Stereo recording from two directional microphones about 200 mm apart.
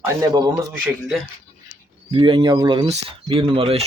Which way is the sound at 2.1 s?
25° right (ahead or behind).